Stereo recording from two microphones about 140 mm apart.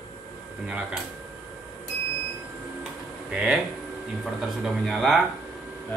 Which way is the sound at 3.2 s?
5° right (ahead or behind).